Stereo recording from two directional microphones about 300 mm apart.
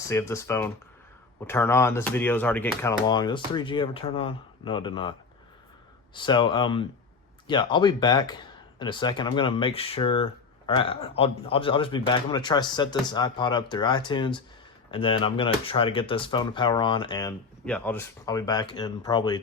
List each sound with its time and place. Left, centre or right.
0.1 s speech: centre
6.1 s speech: centre